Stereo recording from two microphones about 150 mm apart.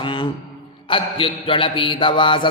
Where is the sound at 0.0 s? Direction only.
35° left (ahead or behind).